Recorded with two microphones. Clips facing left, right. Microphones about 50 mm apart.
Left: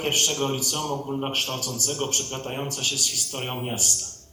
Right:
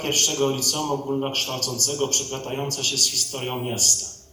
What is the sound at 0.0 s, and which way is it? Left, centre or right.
A man's voice, centre.